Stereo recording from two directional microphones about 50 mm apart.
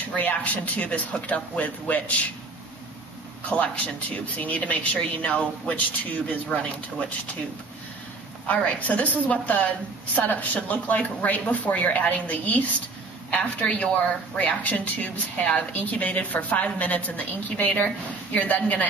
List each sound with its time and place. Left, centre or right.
0.1 s speech: left
3.4 s speech: left
8.5 s a woman's voice: left